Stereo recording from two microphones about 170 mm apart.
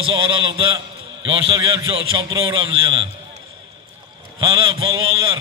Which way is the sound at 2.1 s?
30° right (ahead or behind).